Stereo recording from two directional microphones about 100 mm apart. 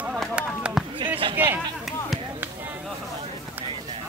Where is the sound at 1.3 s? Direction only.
20° right (ahead or behind).